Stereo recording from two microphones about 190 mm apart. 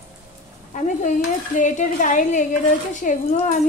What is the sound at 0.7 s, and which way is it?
Stir, 40° left (ahead or behind).